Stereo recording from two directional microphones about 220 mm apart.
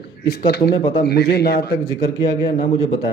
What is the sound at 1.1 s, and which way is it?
Speech, 45° left (ahead or behind).